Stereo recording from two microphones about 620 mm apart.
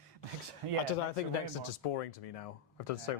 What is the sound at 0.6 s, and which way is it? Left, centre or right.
Speech, right.